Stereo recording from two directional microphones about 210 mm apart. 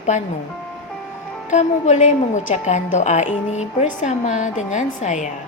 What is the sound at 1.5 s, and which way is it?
A woman's voice, 35° left (ahead or behind).